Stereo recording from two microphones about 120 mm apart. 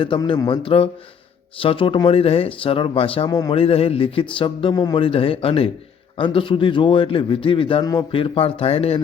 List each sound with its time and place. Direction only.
0.2 s a man's voice: 35° left (ahead or behind)
3.2 s a man's voice: 30° left (ahead or behind)
3.5 s a man's voice: 55° left (ahead or behind)
4.7 s a man's voice: 35° left (ahead or behind)
5.0 s a man's voice: 50° left (ahead or behind)